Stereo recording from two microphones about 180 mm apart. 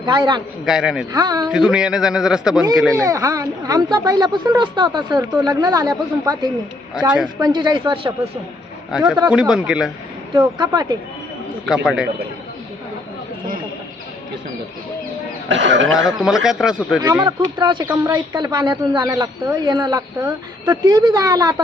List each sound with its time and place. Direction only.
0.0 s speech: 25° right (ahead or behind)
0.6 s a man's voice: centre (ahead or behind)
1.1 s speech: 20° right (ahead or behind)
1.5 s a man's voice: 5° right (ahead or behind)
3.0 s speech: 20° right (ahead or behind)
8.9 s a man's voice: 5° right (ahead or behind)
10.7 s speech: 25° right (ahead or behind)
11.7 s a man's voice: 5° right (ahead or behind)
15.4 s speech: 90° right
16.1 s a man's voice: centre (ahead or behind)
17.2 s speech: 25° right (ahead or behind)